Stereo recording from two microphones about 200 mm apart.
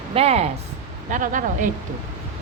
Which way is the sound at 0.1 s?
30° right (ahead or behind).